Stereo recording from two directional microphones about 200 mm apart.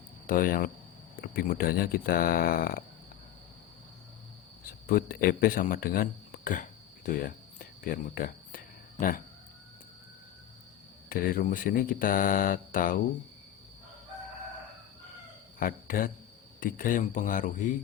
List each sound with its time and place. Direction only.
0.3 s speech: 45° left (ahead or behind)
4.9 s speech: 45° left (ahead or behind)
11.1 s speech: 45° left (ahead or behind)
15.5 s speech: 45° left (ahead or behind)